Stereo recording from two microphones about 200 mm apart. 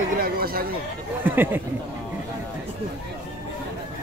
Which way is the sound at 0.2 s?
50° right (ahead or behind).